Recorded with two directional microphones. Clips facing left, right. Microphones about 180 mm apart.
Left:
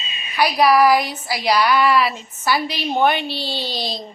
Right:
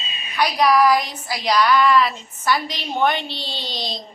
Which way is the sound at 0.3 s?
5° left (ahead or behind).